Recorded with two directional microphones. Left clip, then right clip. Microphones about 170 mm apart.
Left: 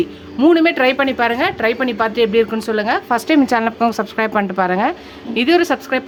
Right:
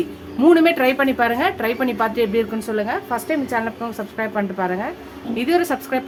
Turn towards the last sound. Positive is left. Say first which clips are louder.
# left 5 dB
turn(degrees=25)  # may be behind; listen again after turning